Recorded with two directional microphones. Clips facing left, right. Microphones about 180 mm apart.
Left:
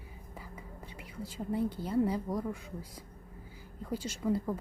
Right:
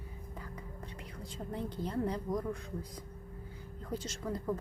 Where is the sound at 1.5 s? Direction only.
5° left (ahead or behind).